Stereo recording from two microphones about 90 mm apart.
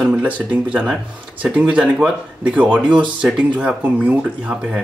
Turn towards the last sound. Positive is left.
turn(degrees=-15)  # may be behind; listen again after turning